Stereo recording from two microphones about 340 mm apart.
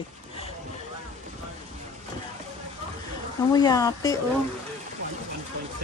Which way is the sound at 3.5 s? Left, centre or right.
Centre.